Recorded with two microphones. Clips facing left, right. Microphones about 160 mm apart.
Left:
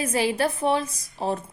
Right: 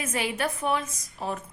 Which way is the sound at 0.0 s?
35° left (ahead or behind).